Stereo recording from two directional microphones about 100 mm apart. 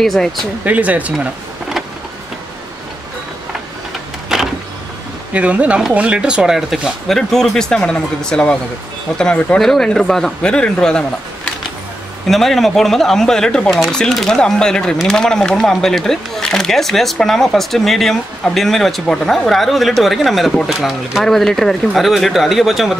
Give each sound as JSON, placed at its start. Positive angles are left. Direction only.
{"t": 0.0, "sound": "speech", "side_deg": 5}
{"t": 0.7, "sound": "speech", "side_deg": -15}
{"t": 4.3, "sound": "power windows", "side_deg": -5}
{"t": 5.3, "sound": "speech", "side_deg": -15}
{"t": 12.3, "sound": "speech", "side_deg": 0}